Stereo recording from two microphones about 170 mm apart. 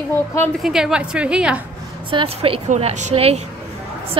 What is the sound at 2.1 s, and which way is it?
A woman's voice, 35° right (ahead or behind).